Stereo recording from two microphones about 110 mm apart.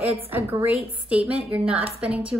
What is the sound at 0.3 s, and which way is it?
A woman's voice, 20° right (ahead or behind).